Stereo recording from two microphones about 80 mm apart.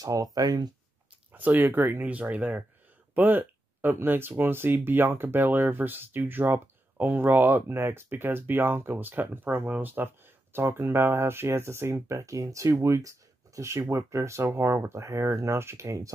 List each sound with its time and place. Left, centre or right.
0.0 s speech: right
1.3 s speech: right